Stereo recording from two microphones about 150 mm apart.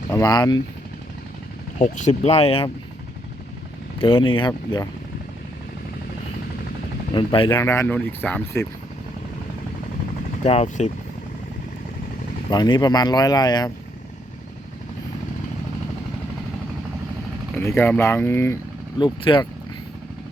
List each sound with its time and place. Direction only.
0.1 s speech: 25° left (ahead or behind)
1.8 s speech: 55° left (ahead or behind)
4.0 s speech: 35° left (ahead or behind)
7.1 s speech: 35° left (ahead or behind)
7.6 s speech: 15° left (ahead or behind)
10.4 s speech: 45° left (ahead or behind)
12.5 s speech: 30° left (ahead or behind)
17.6 s speech: 15° left (ahead or behind)
18.9 s speech: 30° left (ahead or behind)